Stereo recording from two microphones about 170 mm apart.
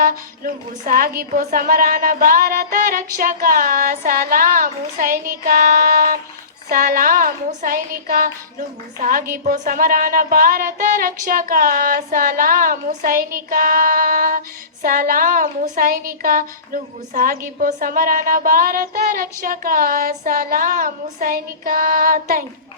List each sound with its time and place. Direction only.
0.0 s a woman's voice: 55° right (ahead or behind)